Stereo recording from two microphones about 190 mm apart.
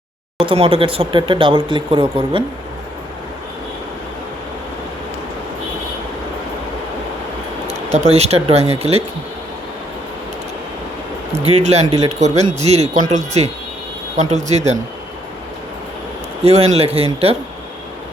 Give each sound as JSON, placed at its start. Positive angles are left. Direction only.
{"t": 0.4, "sound": "speech", "side_deg": -30}
{"t": 7.9, "sound": "speech", "side_deg": -35}
{"t": 11.4, "sound": "speech", "side_deg": -35}
{"t": 16.4, "sound": "speech", "side_deg": -35}